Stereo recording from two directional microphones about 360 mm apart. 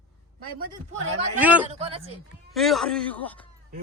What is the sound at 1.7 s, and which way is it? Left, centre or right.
Speech, centre.